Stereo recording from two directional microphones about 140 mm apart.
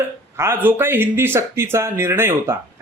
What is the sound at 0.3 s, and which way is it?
A man's voice, 15° right (ahead or behind).